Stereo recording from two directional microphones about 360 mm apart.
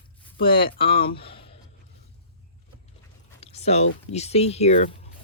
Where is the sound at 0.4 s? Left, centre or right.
Centre.